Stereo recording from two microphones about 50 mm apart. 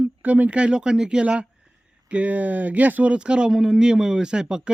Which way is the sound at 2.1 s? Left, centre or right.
Right.